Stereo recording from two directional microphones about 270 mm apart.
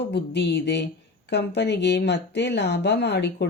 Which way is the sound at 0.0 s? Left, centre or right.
Left.